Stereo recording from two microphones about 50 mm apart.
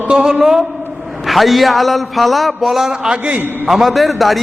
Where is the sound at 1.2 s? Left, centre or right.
Centre.